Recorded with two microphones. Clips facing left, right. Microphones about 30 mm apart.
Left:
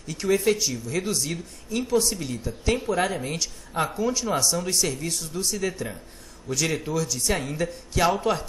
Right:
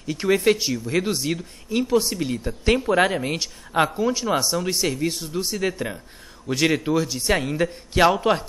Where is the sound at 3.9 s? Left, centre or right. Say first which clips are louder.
Right 3 dB; centre.